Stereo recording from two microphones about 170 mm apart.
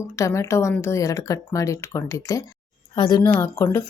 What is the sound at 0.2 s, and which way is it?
Speech, 20° left (ahead or behind).